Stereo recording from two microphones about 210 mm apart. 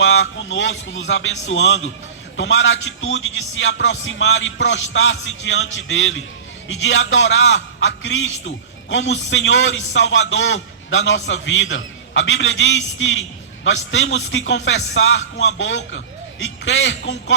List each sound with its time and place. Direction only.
0.0 s speech: 65° left (ahead or behind)